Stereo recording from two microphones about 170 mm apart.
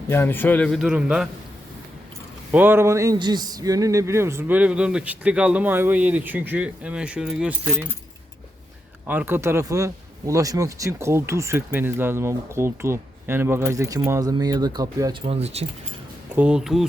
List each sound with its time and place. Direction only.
0.1 s a man's voice: 15° left (ahead or behind); by 1.3 s 5° right (ahead or behind)
2.5 s speech: 10° right (ahead or behind)
9.0 s speech: 10° right (ahead or behind)
15.3 s speech: 40° right (ahead or behind)
16.3 s a man's voice: 5° right (ahead or behind)